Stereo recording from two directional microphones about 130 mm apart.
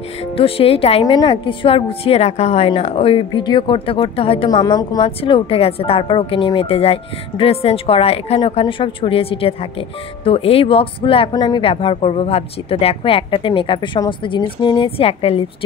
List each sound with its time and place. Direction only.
0.4 s speech: 50° left (ahead or behind)
1.0 s a woman's voice: 35° left (ahead or behind)
4.5 s a woman's voice: 30° left (ahead or behind)
5.0 s speech: 45° left (ahead or behind)
11.3 s speech: 35° left (ahead or behind)